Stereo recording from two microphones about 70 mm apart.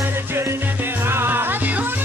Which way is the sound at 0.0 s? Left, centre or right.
Right.